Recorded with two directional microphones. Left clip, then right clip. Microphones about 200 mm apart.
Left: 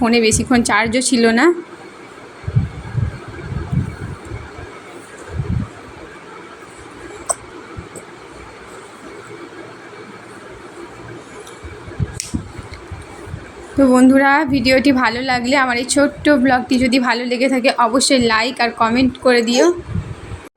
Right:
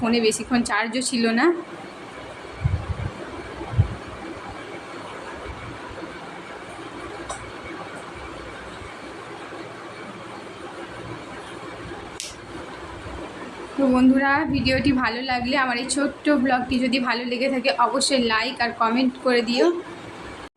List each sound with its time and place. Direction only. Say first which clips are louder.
0.0 s a woman's voice: left 7 dB; 35° left (ahead or behind)
13.9 s a woman's voice: left 7 dB; 40° left (ahead or behind)